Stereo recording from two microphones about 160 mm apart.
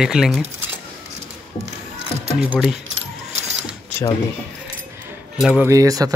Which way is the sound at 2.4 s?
5° right (ahead or behind).